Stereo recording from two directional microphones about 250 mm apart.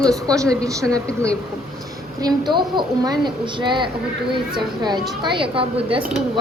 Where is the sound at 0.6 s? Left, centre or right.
Centre.